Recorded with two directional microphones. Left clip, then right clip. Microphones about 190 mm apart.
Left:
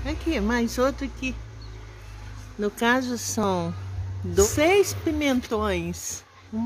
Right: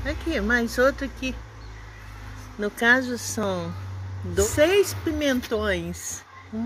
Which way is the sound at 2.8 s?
35° left (ahead or behind).